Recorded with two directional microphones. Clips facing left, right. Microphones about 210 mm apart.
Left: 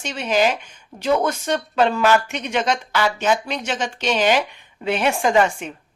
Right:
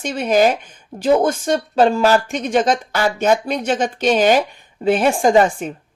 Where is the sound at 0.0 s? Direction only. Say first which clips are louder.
Right 5 dB; 40° right (ahead or behind).